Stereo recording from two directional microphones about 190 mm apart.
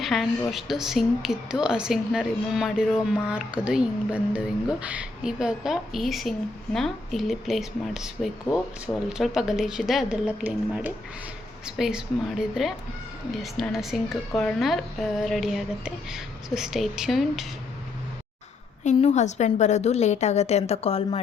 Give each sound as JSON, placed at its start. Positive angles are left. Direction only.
{"t": 0.0, "sound": "a woman's voice", "side_deg": 0}
{"t": 18.9, "sound": "a woman's voice", "side_deg": 35}